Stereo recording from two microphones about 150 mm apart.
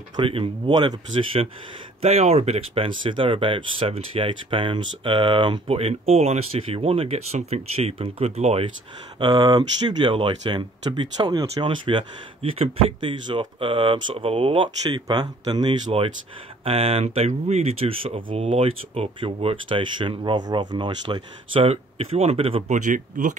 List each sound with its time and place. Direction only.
0.1 s speech: 35° right (ahead or behind)
9.2 s speech: 30° right (ahead or behind)
16.6 s speech: 40° right (ahead or behind)
21.6 s speech: 40° right (ahead or behind)
22.7 s speech: 55° right (ahead or behind)